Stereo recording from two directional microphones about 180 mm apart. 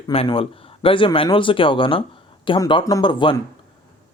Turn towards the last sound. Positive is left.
turn(degrees=25)  # may be behind; listen again after turning